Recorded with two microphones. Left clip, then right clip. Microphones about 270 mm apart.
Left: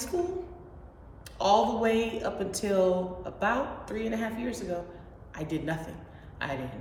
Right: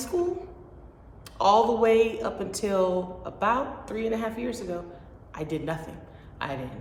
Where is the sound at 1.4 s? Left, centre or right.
Centre.